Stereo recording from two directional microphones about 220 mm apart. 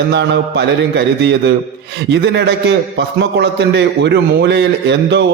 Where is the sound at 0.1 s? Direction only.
50° right (ahead or behind).